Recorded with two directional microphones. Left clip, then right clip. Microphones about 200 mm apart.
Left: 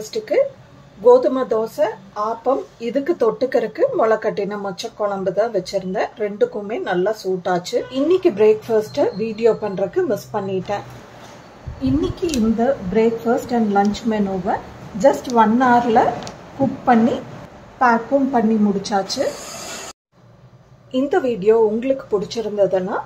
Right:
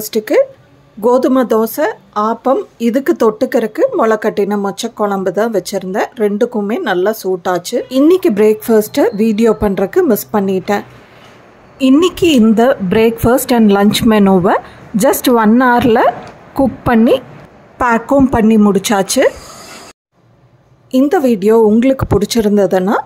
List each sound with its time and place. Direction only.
0.0 s speech: 40° right (ahead or behind)
12.5 s speech: 45° right (ahead or behind)
20.9 s speech: 40° right (ahead or behind)